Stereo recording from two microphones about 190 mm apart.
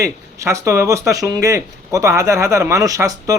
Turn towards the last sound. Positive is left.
turn(degrees=-15)  # may be behind; listen again after turning